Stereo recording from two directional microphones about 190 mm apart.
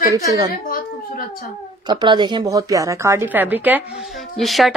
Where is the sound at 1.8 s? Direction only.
25° right (ahead or behind).